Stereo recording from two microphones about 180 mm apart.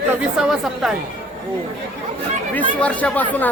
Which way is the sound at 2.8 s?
5° left (ahead or behind).